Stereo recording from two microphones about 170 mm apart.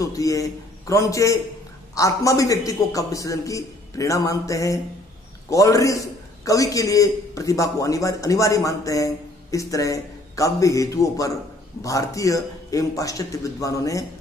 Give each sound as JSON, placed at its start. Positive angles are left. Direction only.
{"t": 0.0, "sound": "a man's voice", "side_deg": 20}